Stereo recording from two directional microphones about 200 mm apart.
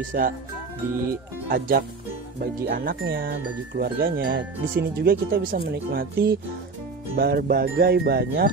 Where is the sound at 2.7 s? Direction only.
50° right (ahead or behind).